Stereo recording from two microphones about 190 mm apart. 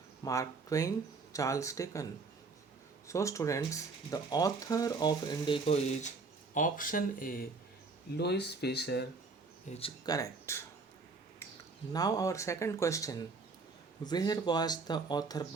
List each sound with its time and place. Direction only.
0.3 s speech: 15° left (ahead or behind)
3.1 s speech: 15° left (ahead or behind)
5.6 s speech: 35° left (ahead or behind)
8.1 s speech: 60° left (ahead or behind)
9.6 s speech: 35° left (ahead or behind)
10.1 s speech: 15° left (ahead or behind)
11.9 s speech: 20° left (ahead or behind)